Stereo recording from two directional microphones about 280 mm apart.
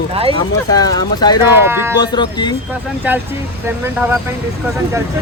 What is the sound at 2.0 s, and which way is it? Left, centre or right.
Speech, centre.